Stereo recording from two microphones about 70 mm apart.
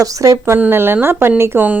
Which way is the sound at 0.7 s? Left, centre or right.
Right.